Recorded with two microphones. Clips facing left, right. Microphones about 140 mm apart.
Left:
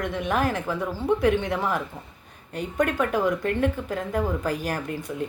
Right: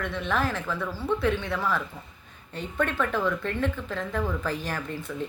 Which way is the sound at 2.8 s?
15° left (ahead or behind).